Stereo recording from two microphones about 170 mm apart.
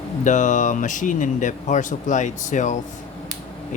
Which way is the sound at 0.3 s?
45° left (ahead or behind).